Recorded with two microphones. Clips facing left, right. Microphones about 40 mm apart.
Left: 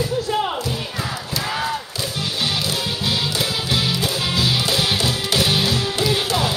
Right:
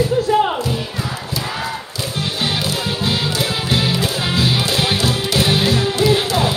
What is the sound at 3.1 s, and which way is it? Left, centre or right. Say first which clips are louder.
Music: right 1 dB; right.